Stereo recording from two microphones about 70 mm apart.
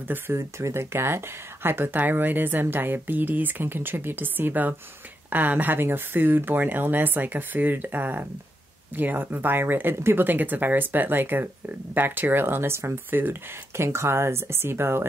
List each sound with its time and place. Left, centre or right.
0.4 s speech: right